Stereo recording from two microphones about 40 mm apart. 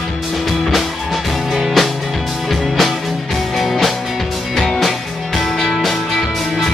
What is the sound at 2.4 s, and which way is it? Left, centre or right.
Music, centre.